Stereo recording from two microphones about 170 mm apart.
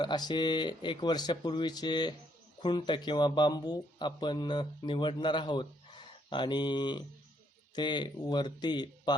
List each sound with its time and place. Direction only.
0.0 s speech: 25° left (ahead or behind)